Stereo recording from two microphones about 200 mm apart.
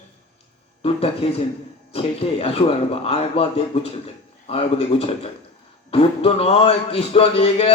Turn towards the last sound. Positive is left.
turn(degrees=30)  # may be behind; listen again after turning